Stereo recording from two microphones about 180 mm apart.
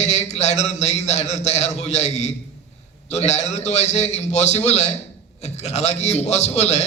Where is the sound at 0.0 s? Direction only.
40° left (ahead or behind).